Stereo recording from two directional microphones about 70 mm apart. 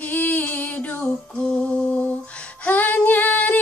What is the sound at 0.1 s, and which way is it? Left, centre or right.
Female singing, left.